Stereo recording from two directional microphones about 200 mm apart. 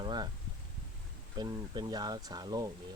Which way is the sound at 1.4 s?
20° right (ahead or behind).